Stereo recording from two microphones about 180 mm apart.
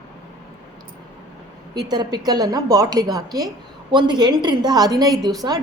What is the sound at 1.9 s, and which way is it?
A woman's voice, 25° right (ahead or behind).